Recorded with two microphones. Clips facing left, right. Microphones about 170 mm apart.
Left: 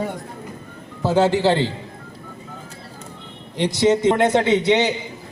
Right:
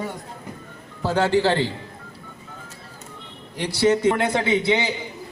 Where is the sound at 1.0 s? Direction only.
15° left (ahead or behind).